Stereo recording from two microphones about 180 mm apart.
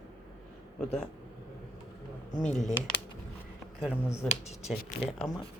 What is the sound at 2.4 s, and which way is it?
Speech, centre (ahead or behind).